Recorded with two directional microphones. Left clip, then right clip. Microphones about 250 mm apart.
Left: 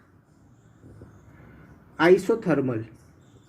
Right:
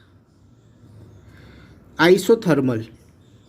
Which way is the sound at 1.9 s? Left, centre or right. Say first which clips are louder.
Right 4 dB; right.